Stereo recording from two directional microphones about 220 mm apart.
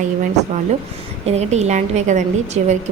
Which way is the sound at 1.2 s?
30° right (ahead or behind).